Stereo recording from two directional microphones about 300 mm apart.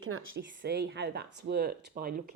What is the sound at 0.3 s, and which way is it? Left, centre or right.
Speech, right.